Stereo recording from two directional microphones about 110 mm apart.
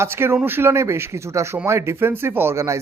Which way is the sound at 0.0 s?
20° right (ahead or behind).